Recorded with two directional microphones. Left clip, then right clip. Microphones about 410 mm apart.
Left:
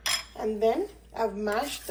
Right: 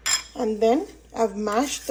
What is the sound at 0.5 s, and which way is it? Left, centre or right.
Speech, centre.